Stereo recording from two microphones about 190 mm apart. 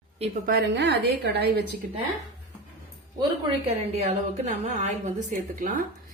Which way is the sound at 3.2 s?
30° right (ahead or behind).